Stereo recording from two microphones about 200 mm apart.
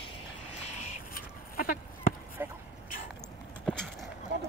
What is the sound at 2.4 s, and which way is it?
Vehicle, 10° right (ahead or behind).